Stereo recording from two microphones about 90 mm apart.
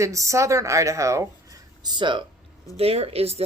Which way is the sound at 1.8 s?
55° right (ahead or behind).